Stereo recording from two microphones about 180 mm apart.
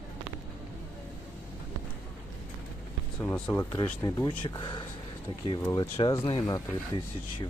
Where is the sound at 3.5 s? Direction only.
20° left (ahead or behind).